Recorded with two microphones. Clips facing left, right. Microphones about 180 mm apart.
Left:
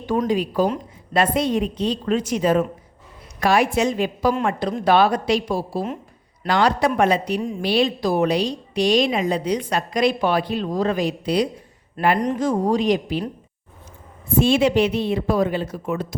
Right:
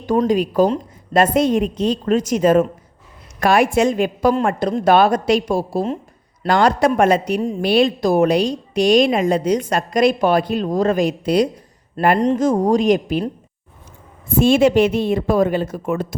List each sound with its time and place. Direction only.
0.3 s a woman's voice: 45° right (ahead or behind)
14.3 s a woman's voice: 50° right (ahead or behind)